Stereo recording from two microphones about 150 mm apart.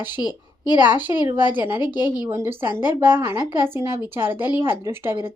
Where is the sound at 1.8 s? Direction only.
30° left (ahead or behind).